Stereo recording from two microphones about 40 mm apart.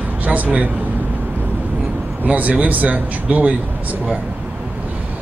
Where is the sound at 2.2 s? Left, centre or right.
Right.